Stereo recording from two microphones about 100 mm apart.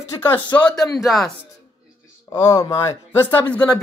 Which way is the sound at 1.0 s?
Centre (ahead or behind).